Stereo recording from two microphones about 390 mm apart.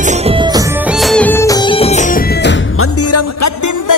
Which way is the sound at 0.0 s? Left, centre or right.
Centre.